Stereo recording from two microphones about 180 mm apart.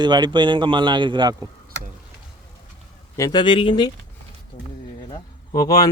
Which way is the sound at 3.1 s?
20° left (ahead or behind).